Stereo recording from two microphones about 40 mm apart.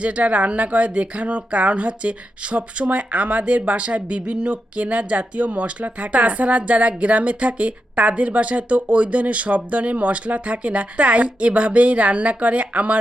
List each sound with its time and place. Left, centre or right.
0.0 s speech: right